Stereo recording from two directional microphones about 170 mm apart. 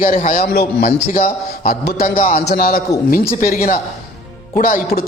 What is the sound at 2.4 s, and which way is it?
A man's voice, 65° left (ahead or behind).